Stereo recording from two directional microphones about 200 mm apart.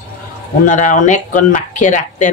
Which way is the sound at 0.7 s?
40° left (ahead or behind).